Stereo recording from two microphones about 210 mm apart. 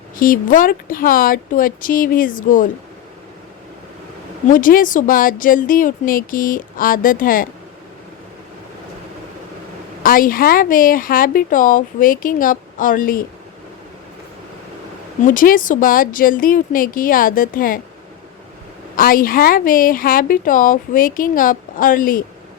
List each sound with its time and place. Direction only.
0.2 s a woman's voice: 40° left (ahead or behind)
4.4 s a woman's voice: 40° left (ahead or behind)
10.0 s a woman's voice: 40° left (ahead or behind)
15.3 s a woman's voice: 40° left (ahead or behind)
18.9 s a woman's voice: 40° left (ahead or behind)